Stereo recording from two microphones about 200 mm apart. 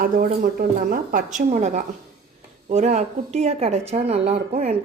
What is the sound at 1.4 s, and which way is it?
Speech, 35° right (ahead or behind).